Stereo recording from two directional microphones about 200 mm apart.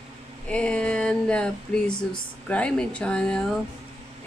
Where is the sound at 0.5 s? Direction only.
5° left (ahead or behind).